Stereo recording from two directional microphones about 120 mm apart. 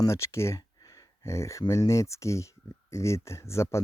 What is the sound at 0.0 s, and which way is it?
Speech, 25° left (ahead or behind).